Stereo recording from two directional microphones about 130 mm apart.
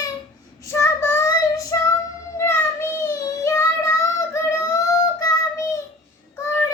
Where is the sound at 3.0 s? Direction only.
25° left (ahead or behind).